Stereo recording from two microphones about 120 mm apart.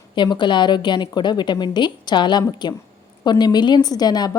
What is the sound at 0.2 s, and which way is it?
A woman's voice, 40° left (ahead or behind).